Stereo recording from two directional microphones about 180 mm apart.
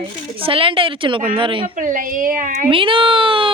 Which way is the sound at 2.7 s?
30° right (ahead or behind).